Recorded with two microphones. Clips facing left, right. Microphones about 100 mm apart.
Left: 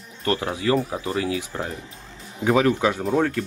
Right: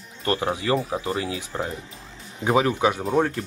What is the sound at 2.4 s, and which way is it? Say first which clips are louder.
Speech: left 1 dB; 20° right (ahead or behind).